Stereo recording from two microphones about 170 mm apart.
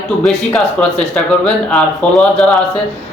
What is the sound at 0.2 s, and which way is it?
A man's voice, 5° left (ahead or behind).